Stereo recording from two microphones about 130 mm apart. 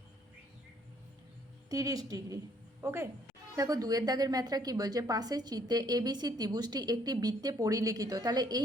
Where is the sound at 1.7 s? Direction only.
30° right (ahead or behind).